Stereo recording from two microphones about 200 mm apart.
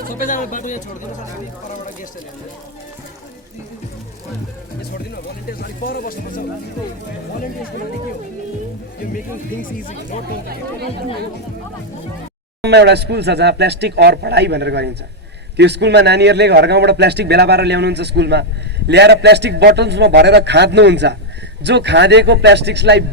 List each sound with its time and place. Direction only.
0.1 s speech: 40° left (ahead or behind)
4.8 s speech: 50° left (ahead or behind)
9.1 s speech: 45° left (ahead or behind)
12.6 s speech: 55° right (ahead or behind)